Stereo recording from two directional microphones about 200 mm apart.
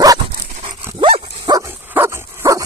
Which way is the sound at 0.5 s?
30° right (ahead or behind).